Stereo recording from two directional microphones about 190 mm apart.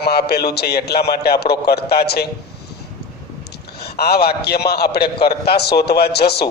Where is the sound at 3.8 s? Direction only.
55° left (ahead or behind).